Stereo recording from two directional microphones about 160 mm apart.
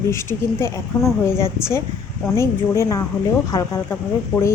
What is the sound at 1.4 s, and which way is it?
A woman's voice, 15° left (ahead or behind).